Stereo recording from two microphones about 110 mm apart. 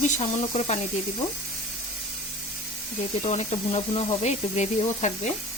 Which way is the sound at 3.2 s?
75° left (ahead or behind).